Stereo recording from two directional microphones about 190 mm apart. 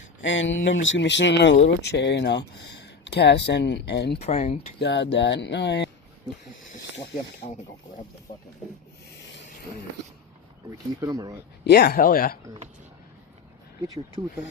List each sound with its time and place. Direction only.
0.2 s speech: 75° left (ahead or behind)
4.2 s speech: 35° left (ahead or behind)
4.8 s speech: 65° left (ahead or behind)
7.4 s speech: 45° left (ahead or behind)
11.0 s speech: 20° right (ahead or behind)
11.6 s speech: 60° left (ahead or behind)